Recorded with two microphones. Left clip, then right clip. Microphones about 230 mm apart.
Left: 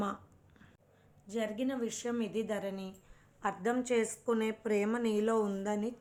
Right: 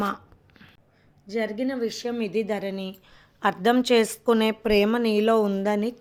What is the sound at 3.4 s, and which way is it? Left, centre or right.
A woman's voice, right.